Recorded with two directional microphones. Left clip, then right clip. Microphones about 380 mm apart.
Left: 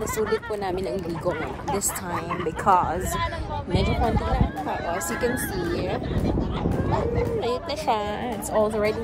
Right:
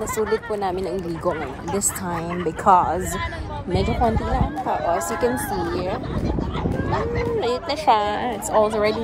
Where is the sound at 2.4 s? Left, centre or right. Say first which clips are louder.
Right 4 dB; right.